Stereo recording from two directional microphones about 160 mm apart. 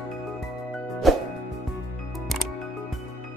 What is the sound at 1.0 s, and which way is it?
Music, centre (ahead or behind).